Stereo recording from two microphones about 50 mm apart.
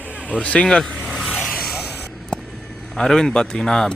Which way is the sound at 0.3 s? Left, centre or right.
Left.